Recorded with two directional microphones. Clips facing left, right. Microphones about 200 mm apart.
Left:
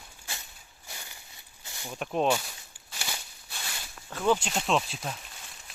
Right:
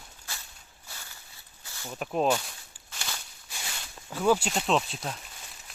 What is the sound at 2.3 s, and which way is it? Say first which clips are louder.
Walk: even; 5° left (ahead or behind).